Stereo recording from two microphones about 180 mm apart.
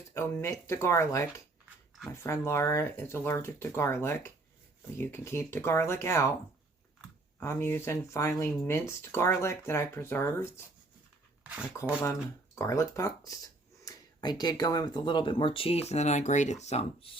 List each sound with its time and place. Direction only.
0.1 s speech: 15° left (ahead or behind)
7.3 s speech: 15° left (ahead or behind)
11.4 s speech: 5° right (ahead or behind)
12.5 s speech: 15° left (ahead or behind); by 17.2 s 35° left (ahead or behind)